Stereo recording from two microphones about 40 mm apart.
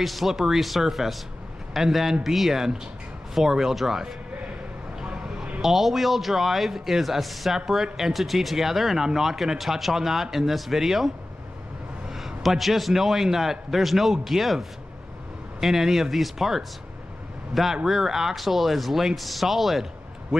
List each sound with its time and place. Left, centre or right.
0.0 s a man's voice: centre
5.0 s a sound: right
5.6 s a man's voice: centre
12.1 s a man's voice: centre